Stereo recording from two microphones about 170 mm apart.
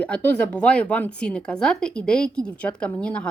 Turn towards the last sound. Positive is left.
turn(degrees=5)  # may be behind; listen again after turning